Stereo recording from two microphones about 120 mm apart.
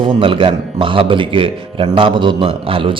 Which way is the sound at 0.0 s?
45° right (ahead or behind).